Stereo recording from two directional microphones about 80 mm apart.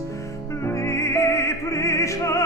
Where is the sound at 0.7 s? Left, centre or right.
Left.